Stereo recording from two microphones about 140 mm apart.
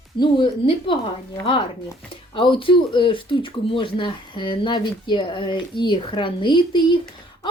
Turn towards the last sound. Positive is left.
turn(degrees=35)  # may be behind; listen again after turning